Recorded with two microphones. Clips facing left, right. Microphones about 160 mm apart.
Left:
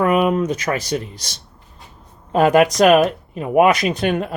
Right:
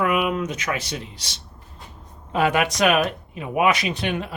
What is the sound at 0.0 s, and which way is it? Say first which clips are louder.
Speech: left 6 dB; 40° left (ahead or behind).